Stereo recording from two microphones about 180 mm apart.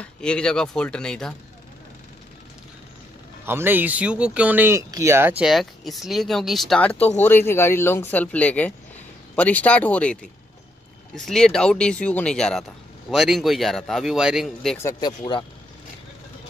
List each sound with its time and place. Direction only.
0.0 s speech: 5° left (ahead or behind)
3.4 s speech: 10° right (ahead or behind)
14.8 s speech: 20° left (ahead or behind)